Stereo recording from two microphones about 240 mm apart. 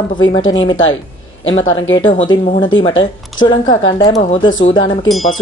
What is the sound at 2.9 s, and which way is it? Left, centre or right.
A woman's voice, left.